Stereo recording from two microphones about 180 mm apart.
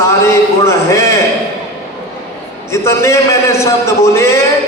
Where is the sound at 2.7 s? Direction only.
15° left (ahead or behind).